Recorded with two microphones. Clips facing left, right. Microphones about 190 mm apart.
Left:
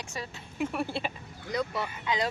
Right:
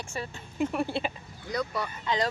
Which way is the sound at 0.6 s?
Centre (ahead or behind).